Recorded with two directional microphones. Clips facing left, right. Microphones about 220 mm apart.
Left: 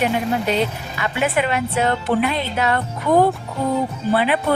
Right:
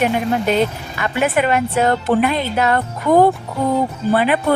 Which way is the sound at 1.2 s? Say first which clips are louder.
Right 4 dB; 50° right (ahead or behind).